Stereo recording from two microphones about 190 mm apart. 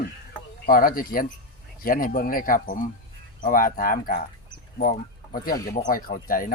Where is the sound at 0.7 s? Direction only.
50° left (ahead or behind).